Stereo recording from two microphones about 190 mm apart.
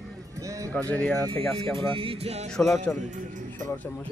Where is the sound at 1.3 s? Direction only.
30° right (ahead or behind).